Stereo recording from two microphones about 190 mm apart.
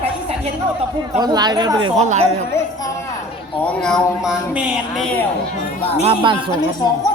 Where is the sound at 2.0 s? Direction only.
35° right (ahead or behind).